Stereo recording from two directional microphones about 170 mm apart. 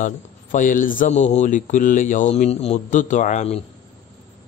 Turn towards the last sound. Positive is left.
turn(degrees=40)  # may be behind; listen again after turning